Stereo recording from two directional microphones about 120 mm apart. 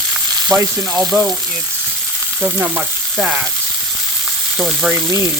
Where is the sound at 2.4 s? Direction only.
15° right (ahead or behind).